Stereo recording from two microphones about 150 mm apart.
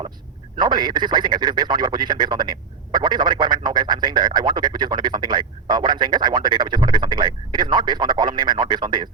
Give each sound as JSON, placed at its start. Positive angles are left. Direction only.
{"t": 0.6, "sound": "a man's voice", "side_deg": -30}